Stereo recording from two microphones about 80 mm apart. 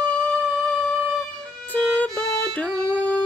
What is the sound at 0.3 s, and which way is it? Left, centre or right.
Music, centre.